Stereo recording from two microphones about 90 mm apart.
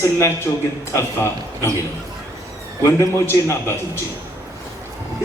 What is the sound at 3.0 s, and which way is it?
A man's voice, 30° left (ahead or behind).